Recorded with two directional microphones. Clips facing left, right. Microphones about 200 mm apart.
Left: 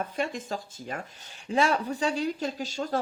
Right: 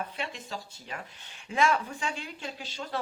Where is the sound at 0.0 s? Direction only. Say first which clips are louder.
Left 6 dB; 45° left (ahead or behind).